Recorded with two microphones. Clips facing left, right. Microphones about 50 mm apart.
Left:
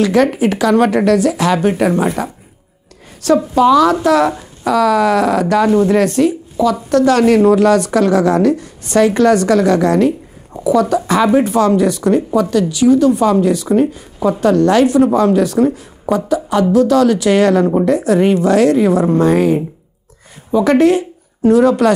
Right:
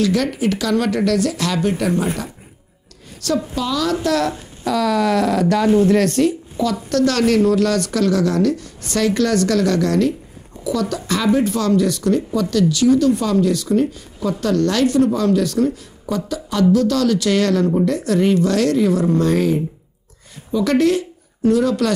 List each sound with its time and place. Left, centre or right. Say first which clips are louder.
0.0 s speech: left 6 dB; left
3.8 s a woman's voice: left 7 dB; centre